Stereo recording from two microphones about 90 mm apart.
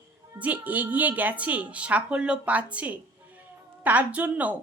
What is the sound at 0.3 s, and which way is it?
A woman's voice, 15° right (ahead or behind).